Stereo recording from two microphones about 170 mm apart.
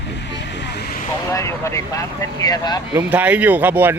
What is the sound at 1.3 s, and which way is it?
Vehicle, 15° left (ahead or behind).